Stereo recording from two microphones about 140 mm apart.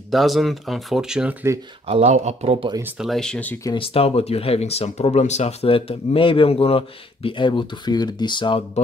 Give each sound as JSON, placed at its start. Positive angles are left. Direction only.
{"t": 0.1, "sound": "speech", "side_deg": 0}
{"t": 1.9, "sound": "speech", "side_deg": -50}
{"t": 2.8, "sound": "speech", "side_deg": 0}
{"t": 3.7, "sound": "speech", "side_deg": 40}